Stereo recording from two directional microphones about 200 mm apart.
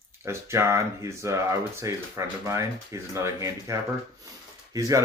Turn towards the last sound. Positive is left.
turn(degrees=-15)  # may be behind; listen again after turning